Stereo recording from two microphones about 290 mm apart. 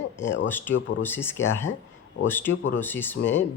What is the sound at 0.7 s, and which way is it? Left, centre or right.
Speech, left.